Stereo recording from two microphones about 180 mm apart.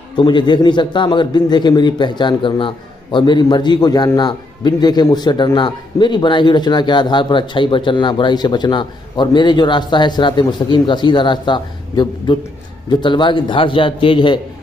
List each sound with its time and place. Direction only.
0.2 s a man's voice: 25° left (ahead or behind)